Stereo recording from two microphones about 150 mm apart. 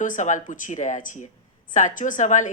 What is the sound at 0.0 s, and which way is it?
Speech, 55° left (ahead or behind).